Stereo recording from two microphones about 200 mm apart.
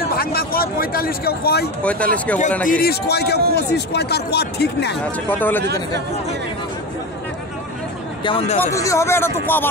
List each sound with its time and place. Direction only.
0.1 s speech: 50° left (ahead or behind)
1.8 s speech: 5° left (ahead or behind)
2.7 s a man's voice: 50° left (ahead or behind)
5.3 s speech: 10° left (ahead or behind)
5.6 s speech: 55° right (ahead or behind)
8.2 s speech: 25° left (ahead or behind)
8.5 s speech: 15° left (ahead or behind)